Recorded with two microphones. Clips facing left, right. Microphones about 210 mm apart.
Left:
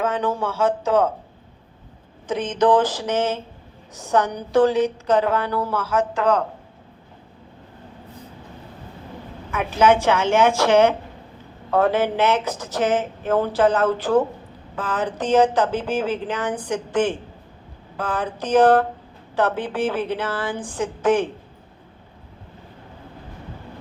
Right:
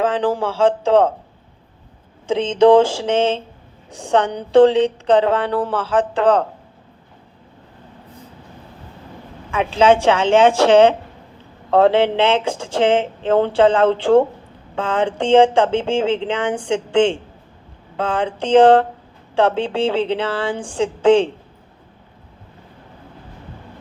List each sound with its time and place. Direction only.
0.0 s speech: 30° right (ahead or behind)
2.2 s speech: 25° right (ahead or behind)
9.6 s speech: 30° right (ahead or behind)